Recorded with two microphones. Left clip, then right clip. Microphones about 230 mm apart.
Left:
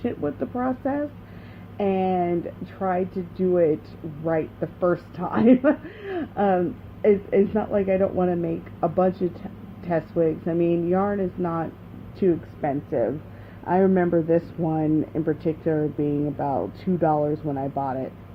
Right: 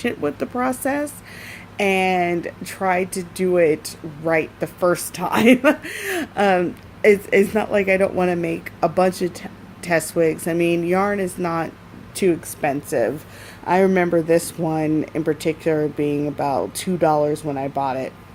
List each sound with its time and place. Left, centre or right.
0.0 s speech: right